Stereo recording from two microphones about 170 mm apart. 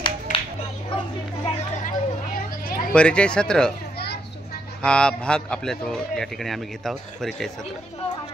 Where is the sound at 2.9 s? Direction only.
5° left (ahead or behind).